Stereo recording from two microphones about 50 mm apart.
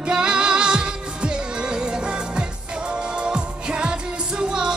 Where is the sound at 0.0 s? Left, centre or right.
Centre.